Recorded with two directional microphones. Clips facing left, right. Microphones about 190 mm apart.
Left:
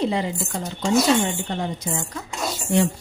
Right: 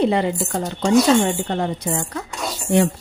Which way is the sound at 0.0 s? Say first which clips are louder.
Right 5 dB; 60° right (ahead or behind).